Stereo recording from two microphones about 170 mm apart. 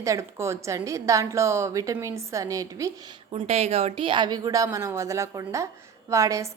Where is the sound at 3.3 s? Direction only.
35° right (ahead or behind).